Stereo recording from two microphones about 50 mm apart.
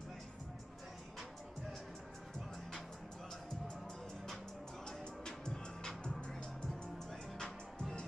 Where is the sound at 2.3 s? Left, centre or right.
Centre.